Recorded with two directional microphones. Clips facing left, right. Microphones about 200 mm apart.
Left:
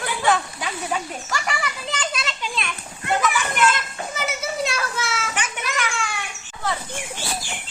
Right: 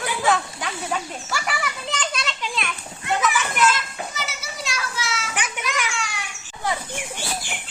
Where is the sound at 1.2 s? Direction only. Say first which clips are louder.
Left 1 dB; 5° right (ahead or behind).